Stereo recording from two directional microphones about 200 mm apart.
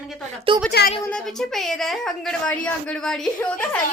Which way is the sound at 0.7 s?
50° left (ahead or behind).